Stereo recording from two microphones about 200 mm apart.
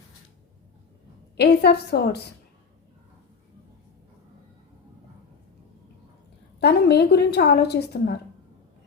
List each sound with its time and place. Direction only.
1.4 s a woman's voice: 55° left (ahead or behind)
6.6 s a woman's voice: 55° left (ahead or behind)